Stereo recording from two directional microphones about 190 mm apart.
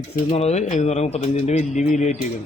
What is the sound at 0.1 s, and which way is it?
Speech, 35° left (ahead or behind).